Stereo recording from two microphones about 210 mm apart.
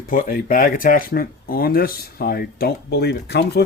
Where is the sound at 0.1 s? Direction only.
40° left (ahead or behind).